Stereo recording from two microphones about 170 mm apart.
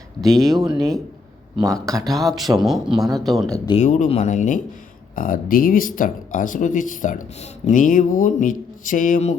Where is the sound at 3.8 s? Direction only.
45° left (ahead or behind).